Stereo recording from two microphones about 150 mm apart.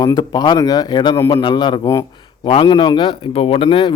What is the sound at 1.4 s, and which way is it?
A man's voice, 30° left (ahead or behind).